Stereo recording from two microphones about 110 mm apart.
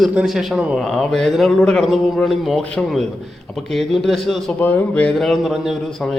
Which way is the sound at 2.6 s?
10° left (ahead or behind).